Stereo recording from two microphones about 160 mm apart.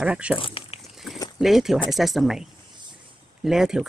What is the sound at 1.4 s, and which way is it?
Speech, centre (ahead or behind).